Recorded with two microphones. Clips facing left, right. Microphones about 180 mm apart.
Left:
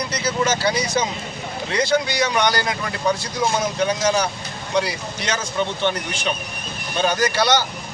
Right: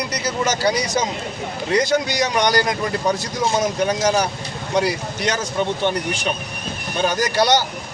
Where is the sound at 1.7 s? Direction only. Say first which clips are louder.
Right 1 dB; 45° right (ahead or behind).